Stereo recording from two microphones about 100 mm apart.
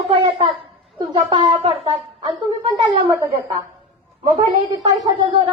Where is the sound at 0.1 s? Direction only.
55° right (ahead or behind).